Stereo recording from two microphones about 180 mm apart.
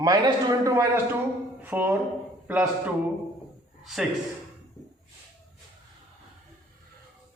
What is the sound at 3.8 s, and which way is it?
Speech, centre (ahead or behind).